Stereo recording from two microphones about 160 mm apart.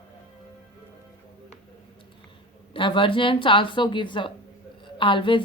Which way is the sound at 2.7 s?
30° left (ahead or behind).